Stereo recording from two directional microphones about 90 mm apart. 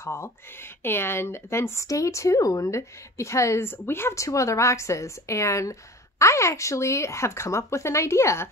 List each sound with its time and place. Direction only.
0.0 s speech: 30° left (ahead or behind)